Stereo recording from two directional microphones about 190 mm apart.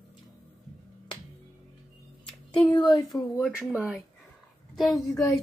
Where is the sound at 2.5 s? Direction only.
25° left (ahead or behind).